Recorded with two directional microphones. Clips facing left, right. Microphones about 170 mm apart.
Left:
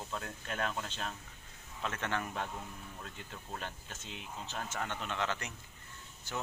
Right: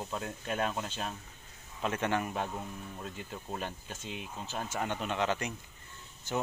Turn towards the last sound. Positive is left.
turn(degrees=-20)  # may be behind; listen again after turning